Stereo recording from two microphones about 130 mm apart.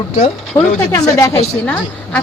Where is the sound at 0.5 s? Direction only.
30° left (ahead or behind).